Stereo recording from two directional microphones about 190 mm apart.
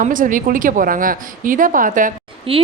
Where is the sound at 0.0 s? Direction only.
45° right (ahead or behind).